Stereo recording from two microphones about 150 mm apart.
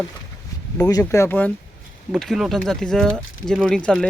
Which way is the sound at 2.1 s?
Centre (ahead or behind).